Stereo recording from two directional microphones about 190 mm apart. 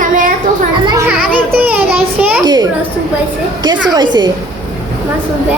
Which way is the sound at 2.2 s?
10° right (ahead or behind).